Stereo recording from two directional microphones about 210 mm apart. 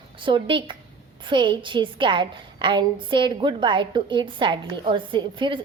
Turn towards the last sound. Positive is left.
turn(degrees=-25)  # may be behind; listen again after turning